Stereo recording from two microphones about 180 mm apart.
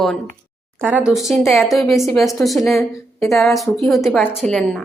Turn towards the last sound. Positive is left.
turn(degrees=0)  # may be behind; listen again after turning